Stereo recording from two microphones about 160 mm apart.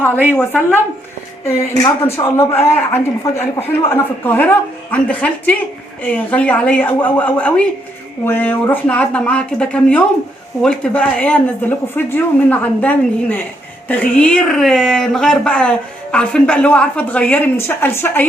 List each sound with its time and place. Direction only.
0.3 s speech: 10° left (ahead or behind)